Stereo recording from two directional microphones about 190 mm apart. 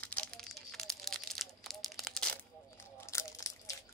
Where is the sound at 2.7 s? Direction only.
15° left (ahead or behind).